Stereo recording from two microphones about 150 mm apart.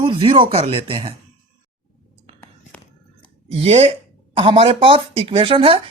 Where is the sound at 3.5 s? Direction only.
40° right (ahead or behind).